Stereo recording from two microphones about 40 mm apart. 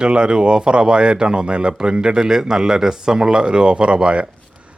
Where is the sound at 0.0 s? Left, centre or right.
Right.